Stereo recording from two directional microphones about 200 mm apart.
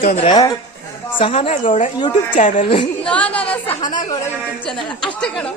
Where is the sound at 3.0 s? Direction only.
5° left (ahead or behind).